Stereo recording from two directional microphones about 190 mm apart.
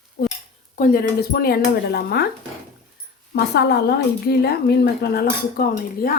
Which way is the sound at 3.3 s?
60° left (ahead or behind).